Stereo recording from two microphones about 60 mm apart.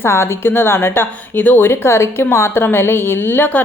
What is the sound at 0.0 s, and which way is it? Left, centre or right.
A woman's voice, left.